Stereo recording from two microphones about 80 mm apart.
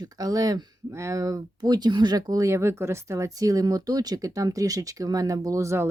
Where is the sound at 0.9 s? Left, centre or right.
Right.